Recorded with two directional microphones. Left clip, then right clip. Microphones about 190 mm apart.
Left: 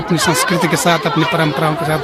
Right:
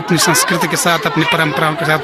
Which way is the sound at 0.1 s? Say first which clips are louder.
Right 2 dB; 10° left (ahead or behind).